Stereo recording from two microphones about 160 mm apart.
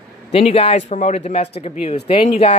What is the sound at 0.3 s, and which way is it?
Speech, 40° left (ahead or behind).